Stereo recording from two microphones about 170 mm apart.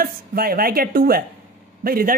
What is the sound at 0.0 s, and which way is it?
A woman's voice, 60° right (ahead or behind).